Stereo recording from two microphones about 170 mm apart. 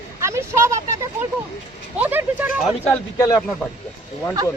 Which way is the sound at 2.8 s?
20° left (ahead or behind).